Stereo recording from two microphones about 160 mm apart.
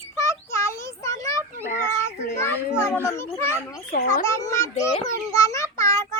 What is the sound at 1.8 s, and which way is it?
Children playing, 20° left (ahead or behind).